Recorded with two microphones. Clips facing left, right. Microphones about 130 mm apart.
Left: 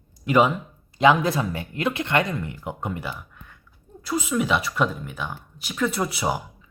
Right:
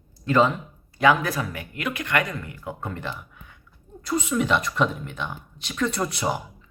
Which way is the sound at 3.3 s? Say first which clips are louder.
Left 1 dB; centre (ahead or behind).